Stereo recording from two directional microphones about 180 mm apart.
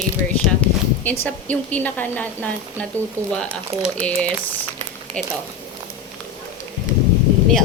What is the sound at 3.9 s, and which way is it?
Speech, 5° left (ahead or behind).